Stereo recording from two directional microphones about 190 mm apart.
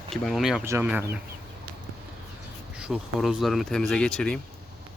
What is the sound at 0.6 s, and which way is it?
Speech, 10° right (ahead or behind).